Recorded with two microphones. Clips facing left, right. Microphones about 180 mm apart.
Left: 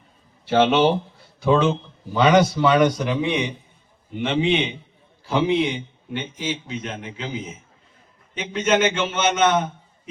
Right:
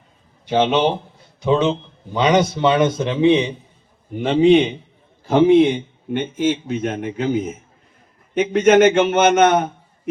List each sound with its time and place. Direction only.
0.4 s a man's voice: 15° right (ahead or behind)
4.1 s a man's voice: 40° right (ahead or behind)